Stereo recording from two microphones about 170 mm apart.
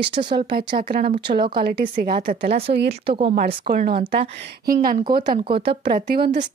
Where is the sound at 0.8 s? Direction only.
60° right (ahead or behind).